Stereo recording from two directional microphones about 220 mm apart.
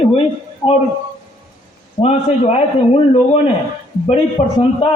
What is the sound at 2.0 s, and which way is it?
Speech, 25° left (ahead or behind).